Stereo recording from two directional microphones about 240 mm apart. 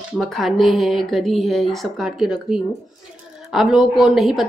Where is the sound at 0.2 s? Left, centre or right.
Centre.